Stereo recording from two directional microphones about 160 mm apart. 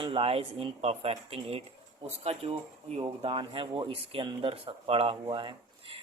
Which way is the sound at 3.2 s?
35° right (ahead or behind).